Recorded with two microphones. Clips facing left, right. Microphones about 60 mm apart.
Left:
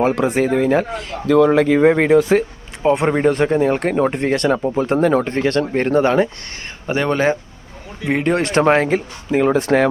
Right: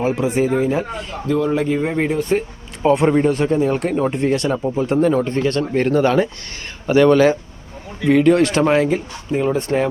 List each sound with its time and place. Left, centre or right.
0.0 s speech: left
2.8 s speech: left
3.2 s speech: left
5.8 s speech: left
6.8 s speech: left
9.3 s speech: left